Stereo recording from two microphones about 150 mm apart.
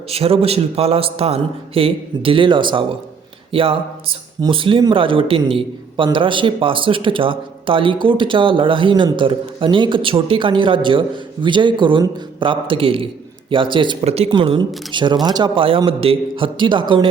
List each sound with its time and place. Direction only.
0.1 s a man's voice: 40° right (ahead or behind)
14.0 s speech: 45° right (ahead or behind)
14.3 s a man's voice: 35° right (ahead or behind)